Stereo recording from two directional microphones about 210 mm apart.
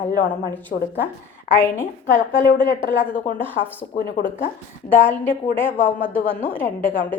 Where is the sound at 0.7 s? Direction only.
45° left (ahead or behind).